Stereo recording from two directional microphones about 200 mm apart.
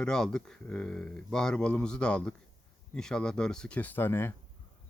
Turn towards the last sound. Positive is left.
turn(degrees=10)  # may be behind; listen again after turning